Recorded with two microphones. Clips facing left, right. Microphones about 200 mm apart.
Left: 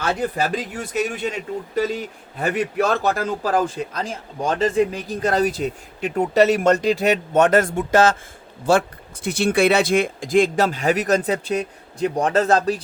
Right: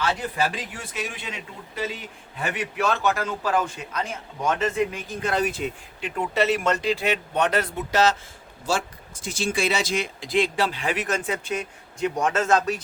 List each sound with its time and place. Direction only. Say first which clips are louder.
0.0 s a man's voice: left 3 dB; 45° left (ahead or behind)